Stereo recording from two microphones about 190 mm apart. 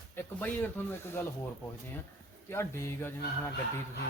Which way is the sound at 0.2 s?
10° left (ahead or behind).